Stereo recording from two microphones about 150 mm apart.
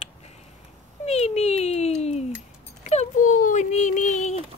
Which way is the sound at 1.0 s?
45° left (ahead or behind).